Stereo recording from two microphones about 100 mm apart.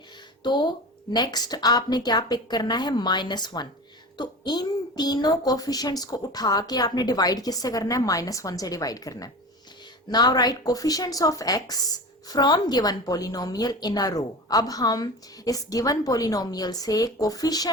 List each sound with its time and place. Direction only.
0.4 s a woman's voice: 50° left (ahead or behind)